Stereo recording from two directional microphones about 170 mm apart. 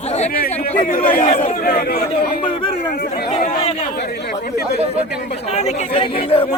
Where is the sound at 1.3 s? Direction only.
40° left (ahead or behind).